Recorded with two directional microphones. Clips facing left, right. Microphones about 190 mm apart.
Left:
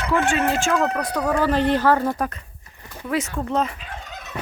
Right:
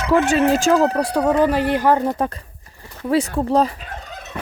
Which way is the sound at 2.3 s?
35° right (ahead or behind).